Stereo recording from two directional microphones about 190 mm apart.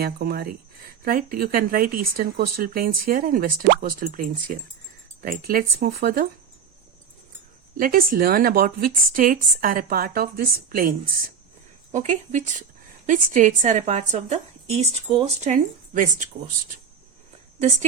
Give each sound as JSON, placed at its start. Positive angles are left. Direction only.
{"t": 0.0, "sound": "speech", "side_deg": -55}
{"t": 7.8, "sound": "speech", "side_deg": -50}
{"t": 11.9, "sound": "a woman's voice", "side_deg": -40}